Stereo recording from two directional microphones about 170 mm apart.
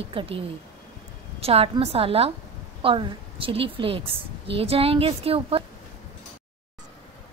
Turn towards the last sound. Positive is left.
turn(degrees=-35)  # may be behind; listen again after turning